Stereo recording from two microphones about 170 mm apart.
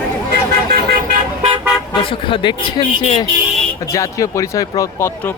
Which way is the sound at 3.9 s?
20° left (ahead or behind).